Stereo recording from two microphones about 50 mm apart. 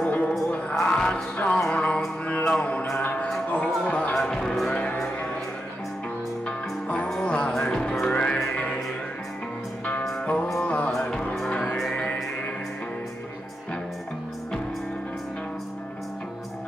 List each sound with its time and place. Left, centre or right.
0.0 s music: left
4.1 s music: centre
6.4 s music: left
8.1 s music: left
10.2 s music: left
10.9 s music: centre